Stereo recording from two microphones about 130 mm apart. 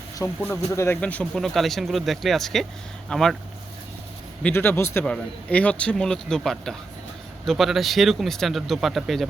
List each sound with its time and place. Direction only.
0.4 s speech: 20° left (ahead or behind); by 3.3 s 5° left (ahead or behind)
4.4 s speech: 15° left (ahead or behind); by 9.2 s centre (ahead or behind)